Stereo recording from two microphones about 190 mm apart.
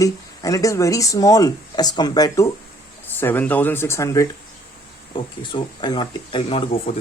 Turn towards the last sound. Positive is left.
turn(degrees=30)  # may be behind; listen again after turning